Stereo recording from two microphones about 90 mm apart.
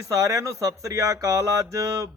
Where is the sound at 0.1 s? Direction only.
35° right (ahead or behind).